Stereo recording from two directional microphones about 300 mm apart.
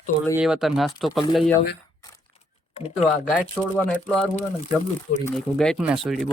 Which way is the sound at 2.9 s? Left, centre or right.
Centre.